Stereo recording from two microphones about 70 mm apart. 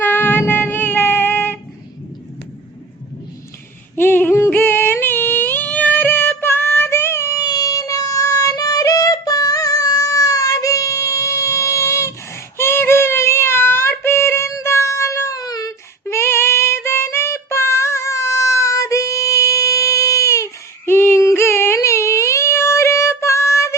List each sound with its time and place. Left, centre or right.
0.0 s music: left
3.9 s a sound: left
7.3 s child singing: left
14.5 s music: left
15.4 s a sound: left
16.0 s child singing: left
20.8 s female singing: left
21.2 s a sound: left
21.8 s child singing: left